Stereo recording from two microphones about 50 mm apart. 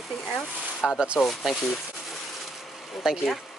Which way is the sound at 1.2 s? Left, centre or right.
Centre.